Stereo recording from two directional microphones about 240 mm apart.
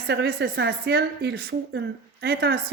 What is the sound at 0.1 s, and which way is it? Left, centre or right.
Speech, right.